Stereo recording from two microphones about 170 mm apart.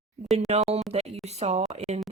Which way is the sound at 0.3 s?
40° right (ahead or behind).